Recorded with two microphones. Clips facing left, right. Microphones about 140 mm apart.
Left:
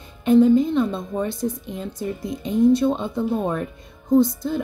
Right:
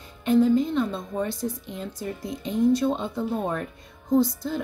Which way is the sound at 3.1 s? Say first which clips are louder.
Left 4 dB; 20° left (ahead or behind).